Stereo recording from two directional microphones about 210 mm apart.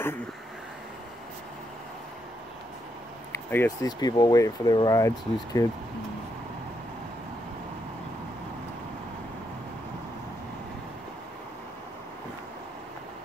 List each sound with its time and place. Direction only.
3.4 s speech: 10° left (ahead or behind)